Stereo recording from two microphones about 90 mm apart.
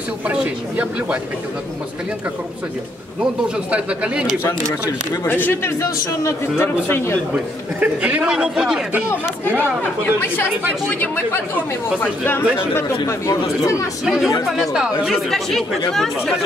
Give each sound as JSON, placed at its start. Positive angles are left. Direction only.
{"t": 0.3, "sound": "a man's voice", "side_deg": -15}
{"t": 3.7, "sound": "a man's voice", "side_deg": -10}
{"t": 5.2, "sound": "a man's voice", "side_deg": 25}
{"t": 7.8, "sound": "a man's voice", "side_deg": -15}
{"t": 10.9, "sound": "a man's voice", "side_deg": 20}
{"t": 13.0, "sound": "speech", "side_deg": 35}
{"t": 14.0, "sound": "speech", "side_deg": -5}